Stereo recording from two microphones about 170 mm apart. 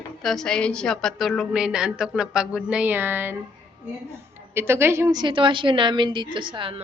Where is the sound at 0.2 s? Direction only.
Centre (ahead or behind).